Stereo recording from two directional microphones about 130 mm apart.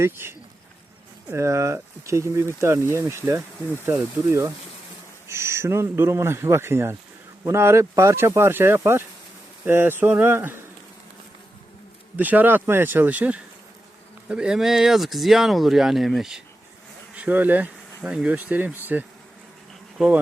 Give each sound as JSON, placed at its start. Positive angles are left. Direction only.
{"t": 0.0, "sound": "speech", "side_deg": -15}
{"t": 12.1, "sound": "speech", "side_deg": -15}
{"t": 17.2, "sound": "speech", "side_deg": -15}
{"t": 20.0, "sound": "speech", "side_deg": -5}